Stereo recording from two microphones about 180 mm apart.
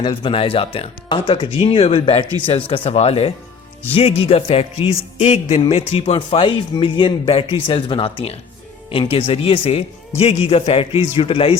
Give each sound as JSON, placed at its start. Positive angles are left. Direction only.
{"t": 0.0, "sound": "speech", "side_deg": 25}